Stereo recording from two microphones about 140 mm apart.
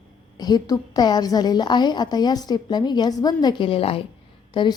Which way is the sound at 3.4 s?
40° left (ahead or behind).